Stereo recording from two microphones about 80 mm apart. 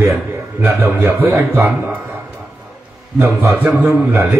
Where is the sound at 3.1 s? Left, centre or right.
Right.